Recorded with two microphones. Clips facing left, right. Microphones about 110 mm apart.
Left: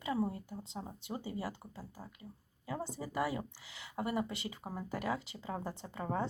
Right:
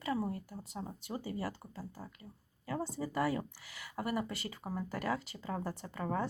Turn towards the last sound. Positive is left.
turn(degrees=20)  # may be behind; listen again after turning